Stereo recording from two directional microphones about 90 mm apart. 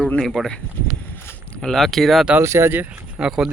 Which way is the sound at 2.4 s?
30° right (ahead or behind).